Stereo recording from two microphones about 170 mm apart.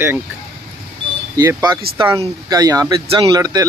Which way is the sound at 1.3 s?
20° right (ahead or behind).